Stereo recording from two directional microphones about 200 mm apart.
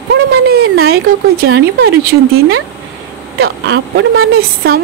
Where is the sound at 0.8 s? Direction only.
50° right (ahead or behind).